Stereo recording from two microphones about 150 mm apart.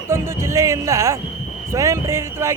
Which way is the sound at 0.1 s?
15° right (ahead or behind).